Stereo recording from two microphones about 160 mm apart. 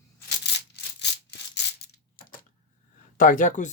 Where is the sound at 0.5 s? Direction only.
90° left.